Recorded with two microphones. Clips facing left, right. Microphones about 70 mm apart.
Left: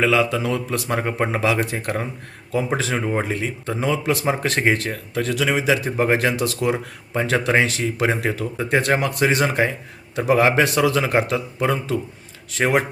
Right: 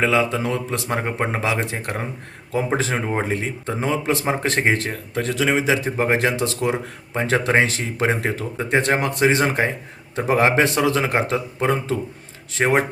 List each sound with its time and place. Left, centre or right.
0.0 s speech: right
0.9 s speech: centre
1.4 s speech: right